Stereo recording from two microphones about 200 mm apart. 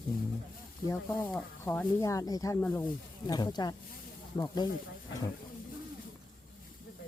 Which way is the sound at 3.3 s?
20° left (ahead or behind).